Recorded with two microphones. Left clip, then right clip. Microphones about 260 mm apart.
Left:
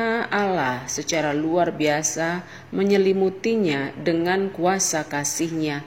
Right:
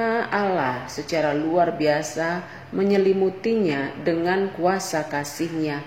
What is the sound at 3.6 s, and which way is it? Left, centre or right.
Speech, left.